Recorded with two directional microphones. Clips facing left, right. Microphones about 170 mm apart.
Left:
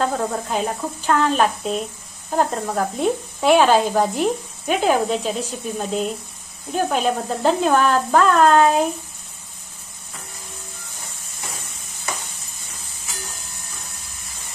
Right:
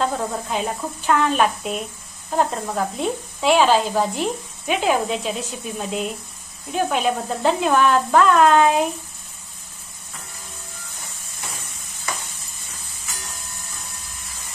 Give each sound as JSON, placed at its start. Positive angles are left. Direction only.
{"t": 0.0, "sound": "speech", "side_deg": 45}
{"t": 2.3, "sound": "speech", "side_deg": 50}